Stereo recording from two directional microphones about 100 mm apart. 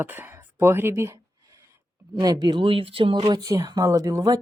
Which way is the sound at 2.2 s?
40° right (ahead or behind).